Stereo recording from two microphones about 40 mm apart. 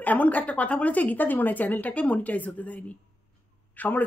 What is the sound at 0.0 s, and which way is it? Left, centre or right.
A woman's voice, left.